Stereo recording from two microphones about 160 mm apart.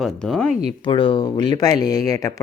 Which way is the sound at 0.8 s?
30° left (ahead or behind).